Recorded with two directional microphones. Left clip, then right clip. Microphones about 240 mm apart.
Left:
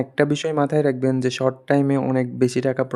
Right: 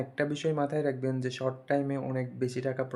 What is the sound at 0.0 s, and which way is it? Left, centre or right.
Speech, left.